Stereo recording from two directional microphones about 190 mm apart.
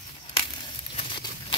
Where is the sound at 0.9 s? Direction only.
25° left (ahead or behind).